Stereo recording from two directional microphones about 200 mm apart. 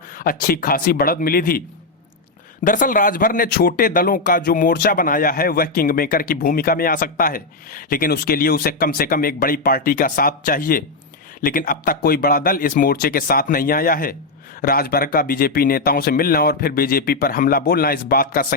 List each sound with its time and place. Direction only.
0.1 s a man's voice: 45° left (ahead or behind)
2.6 s a man's voice: 40° left (ahead or behind)